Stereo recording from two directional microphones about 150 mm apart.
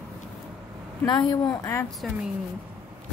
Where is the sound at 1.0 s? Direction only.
30° left (ahead or behind).